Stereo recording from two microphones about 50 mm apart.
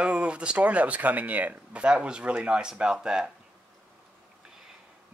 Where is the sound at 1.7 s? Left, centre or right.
Right.